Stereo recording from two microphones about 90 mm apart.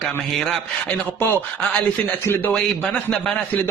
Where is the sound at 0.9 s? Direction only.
25° left (ahead or behind).